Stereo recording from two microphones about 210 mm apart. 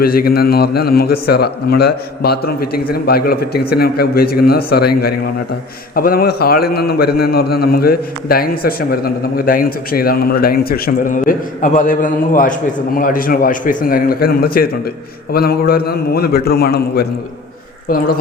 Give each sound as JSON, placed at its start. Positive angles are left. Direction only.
{"t": 0.0, "sound": "a man's voice", "side_deg": 45}